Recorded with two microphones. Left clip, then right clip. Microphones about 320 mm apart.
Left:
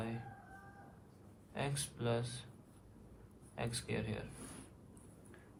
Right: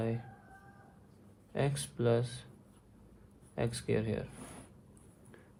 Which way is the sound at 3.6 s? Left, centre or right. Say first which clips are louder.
Right 7 dB; right.